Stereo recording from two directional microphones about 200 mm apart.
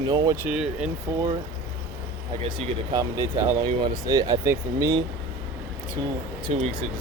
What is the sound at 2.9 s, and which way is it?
Speech, 15° right (ahead or behind).